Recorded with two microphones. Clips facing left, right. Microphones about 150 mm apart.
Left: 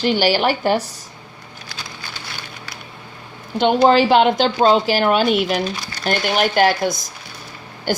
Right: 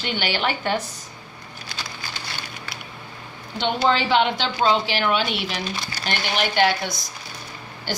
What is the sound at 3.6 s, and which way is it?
A woman's voice, 45° left (ahead or behind).